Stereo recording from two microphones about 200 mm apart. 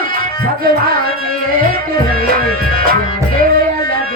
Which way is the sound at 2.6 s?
45° right (ahead or behind).